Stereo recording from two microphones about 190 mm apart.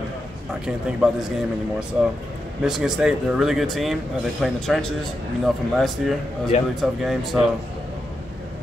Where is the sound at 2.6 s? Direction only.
Centre (ahead or behind).